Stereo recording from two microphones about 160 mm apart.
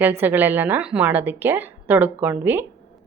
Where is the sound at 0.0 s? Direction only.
15° right (ahead or behind).